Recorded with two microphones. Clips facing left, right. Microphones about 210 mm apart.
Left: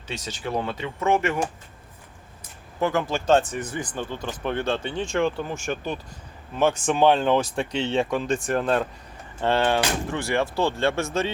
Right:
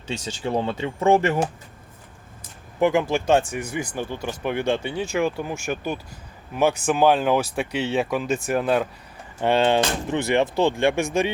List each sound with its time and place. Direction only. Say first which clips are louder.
0.1 s speech: right 3 dB; 25° right (ahead or behind)
2.8 s speech: right 3 dB; 15° right (ahead or behind)